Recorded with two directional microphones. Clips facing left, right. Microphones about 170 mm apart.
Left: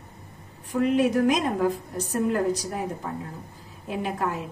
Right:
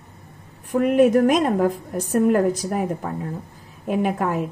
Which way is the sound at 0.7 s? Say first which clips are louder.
Right 6 dB; 50° right (ahead or behind).